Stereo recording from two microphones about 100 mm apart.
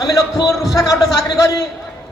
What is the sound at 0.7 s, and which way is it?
Speech, 35° left (ahead or behind).